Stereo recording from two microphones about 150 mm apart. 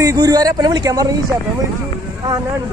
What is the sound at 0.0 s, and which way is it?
Speech, 25° right (ahead or behind).